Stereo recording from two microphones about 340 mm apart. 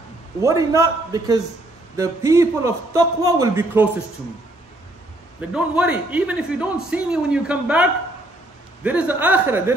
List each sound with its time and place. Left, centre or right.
0.4 s a man's voice: centre
5.5 s a man's voice: centre